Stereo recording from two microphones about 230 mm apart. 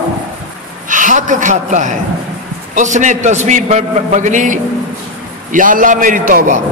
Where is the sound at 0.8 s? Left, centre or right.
Right.